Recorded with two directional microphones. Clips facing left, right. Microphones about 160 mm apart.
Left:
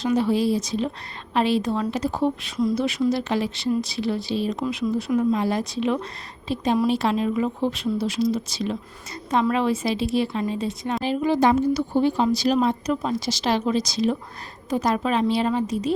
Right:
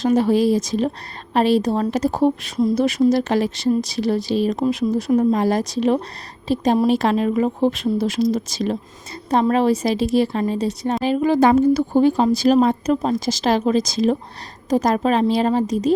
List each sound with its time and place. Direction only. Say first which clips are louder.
0.0 s a woman's voice: right 5 dB; 45° right (ahead or behind)